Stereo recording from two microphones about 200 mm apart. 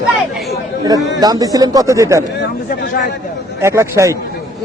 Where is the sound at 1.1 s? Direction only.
20° right (ahead or behind).